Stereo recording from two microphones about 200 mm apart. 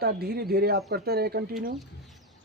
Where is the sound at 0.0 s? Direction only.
50° right (ahead or behind).